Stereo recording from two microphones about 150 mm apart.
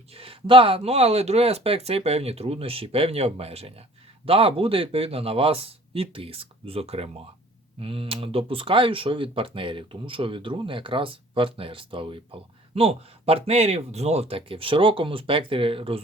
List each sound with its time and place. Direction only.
0.1 s speech: 40° right (ahead or behind)